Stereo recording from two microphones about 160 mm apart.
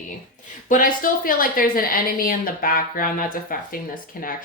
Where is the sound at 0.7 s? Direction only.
60° left (ahead or behind).